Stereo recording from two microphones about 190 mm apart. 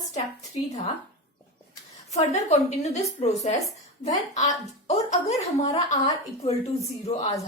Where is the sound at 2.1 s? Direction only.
35° left (ahead or behind).